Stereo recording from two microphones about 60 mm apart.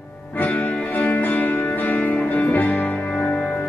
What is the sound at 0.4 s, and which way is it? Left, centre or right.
Music, left.